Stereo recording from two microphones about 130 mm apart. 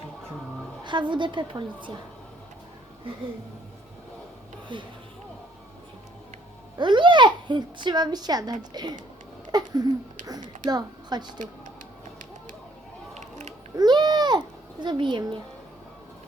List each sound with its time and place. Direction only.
0.9 s a child's voice: 35° right (ahead or behind)
4.7 s a child's voice: 40° right (ahead or behind)
6.7 s a child's voice: 35° right (ahead or behind)
13.7 s a sound: 35° right (ahead or behind)